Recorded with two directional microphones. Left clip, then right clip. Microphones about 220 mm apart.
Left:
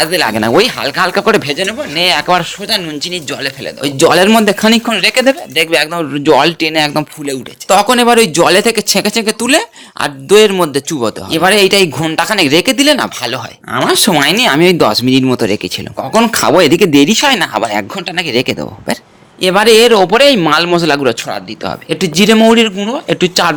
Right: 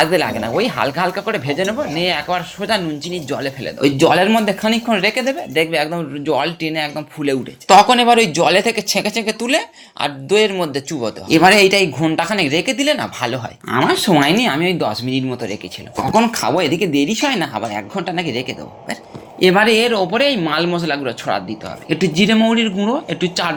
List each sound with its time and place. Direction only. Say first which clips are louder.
0.0 s speech: left 4 dB; 50° left (ahead or behind)
7.9 s speech: left 4 dB; 35° left (ahead or behind)
11.3 s speech: left 1 dB; 20° left (ahead or behind)
11.6 s speech: left 4 dB; 35° left (ahead or behind); by 15.7 s 55° left (ahead or behind)
16.1 s speech: left 7 dB; 40° left (ahead or behind)
19.4 s speech: left 2 dB; 25° left (ahead or behind)
19.7 s speech: left 9 dB; 50° left (ahead or behind)
21.8 s speech: left 1 dB; 30° left (ahead or behind)
22.2 s speech: left 9 dB; 50° left (ahead or behind)